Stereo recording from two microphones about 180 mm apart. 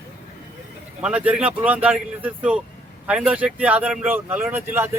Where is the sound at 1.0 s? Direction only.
5° right (ahead or behind).